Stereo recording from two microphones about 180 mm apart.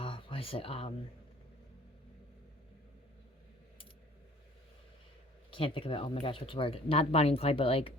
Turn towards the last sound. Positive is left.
turn(degrees=30)  # may be behind; listen again after turning